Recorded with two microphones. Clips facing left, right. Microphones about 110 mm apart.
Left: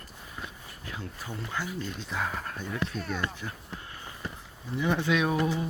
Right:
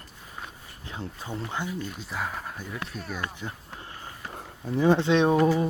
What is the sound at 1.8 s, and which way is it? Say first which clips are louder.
Speech: even; 5° right (ahead or behind).